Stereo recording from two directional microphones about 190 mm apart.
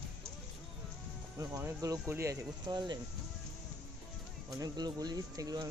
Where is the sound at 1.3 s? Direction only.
15° right (ahead or behind).